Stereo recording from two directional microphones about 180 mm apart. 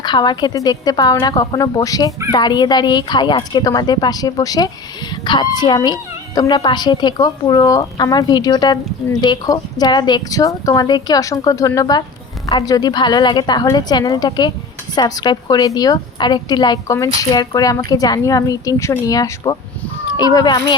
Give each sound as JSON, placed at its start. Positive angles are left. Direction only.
{"t": 0.0, "sound": "a woman's voice", "side_deg": 25}